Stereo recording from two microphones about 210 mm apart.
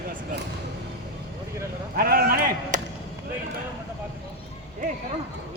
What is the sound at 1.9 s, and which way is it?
Speech, 45° right (ahead or behind).